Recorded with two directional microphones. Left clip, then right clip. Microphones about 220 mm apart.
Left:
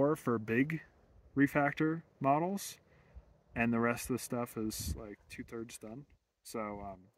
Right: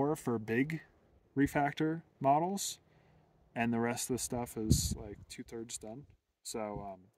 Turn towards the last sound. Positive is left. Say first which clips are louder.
# right 1 dB
turn(degrees=-15)  # may be behind; listen again after turning